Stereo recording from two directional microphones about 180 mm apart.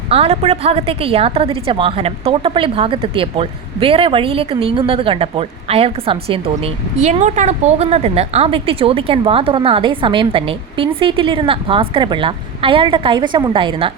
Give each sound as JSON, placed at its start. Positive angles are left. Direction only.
{"t": 0.1, "sound": "a woman's voice", "side_deg": -35}